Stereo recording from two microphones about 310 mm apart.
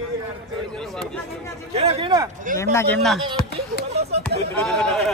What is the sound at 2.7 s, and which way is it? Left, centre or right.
Speech, centre.